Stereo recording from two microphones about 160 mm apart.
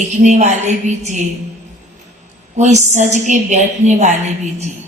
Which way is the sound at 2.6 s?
45° right (ahead or behind).